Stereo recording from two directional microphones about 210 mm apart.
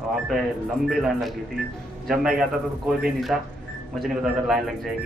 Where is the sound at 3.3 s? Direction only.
Centre (ahead or behind).